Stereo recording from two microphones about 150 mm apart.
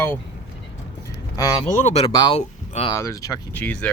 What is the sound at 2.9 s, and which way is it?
Speech, 20° left (ahead or behind).